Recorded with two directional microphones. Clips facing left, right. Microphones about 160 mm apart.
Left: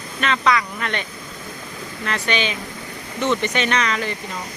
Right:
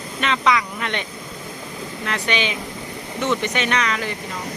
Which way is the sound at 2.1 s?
15° right (ahead or behind).